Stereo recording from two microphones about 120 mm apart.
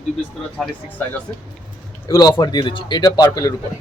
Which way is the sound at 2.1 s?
35° left (ahead or behind).